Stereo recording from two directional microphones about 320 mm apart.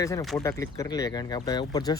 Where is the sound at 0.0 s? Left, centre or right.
Centre.